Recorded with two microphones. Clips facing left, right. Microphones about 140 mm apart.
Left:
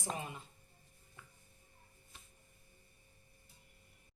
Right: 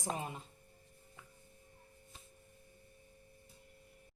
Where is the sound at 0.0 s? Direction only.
40° right (ahead or behind).